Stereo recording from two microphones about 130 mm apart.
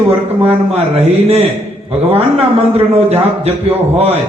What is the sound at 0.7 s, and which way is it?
A man's voice, 55° right (ahead or behind).